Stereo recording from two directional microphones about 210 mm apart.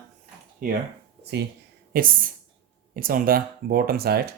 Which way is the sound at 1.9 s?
40° right (ahead or behind).